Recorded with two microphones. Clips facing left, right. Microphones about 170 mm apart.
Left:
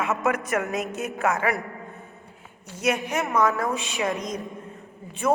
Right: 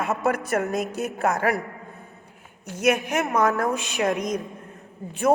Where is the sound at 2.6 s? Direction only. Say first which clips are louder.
Right 3 dB; 50° right (ahead or behind).